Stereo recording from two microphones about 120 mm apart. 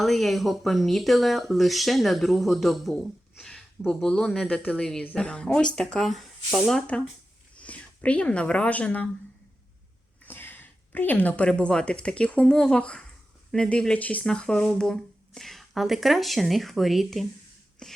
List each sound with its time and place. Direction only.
0.0 s speech: centre (ahead or behind)
10.2 s a woman's voice: 15° left (ahead or behind); by 17.2 s centre (ahead or behind)
17.8 s a sound: 5° left (ahead or behind)